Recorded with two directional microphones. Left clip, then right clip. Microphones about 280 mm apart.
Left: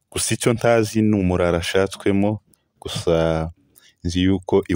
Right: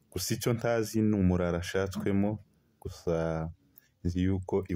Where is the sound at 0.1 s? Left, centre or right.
Left.